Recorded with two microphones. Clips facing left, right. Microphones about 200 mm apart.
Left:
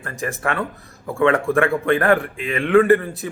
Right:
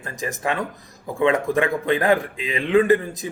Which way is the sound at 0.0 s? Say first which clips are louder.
Left 1 dB; 15° right (ahead or behind).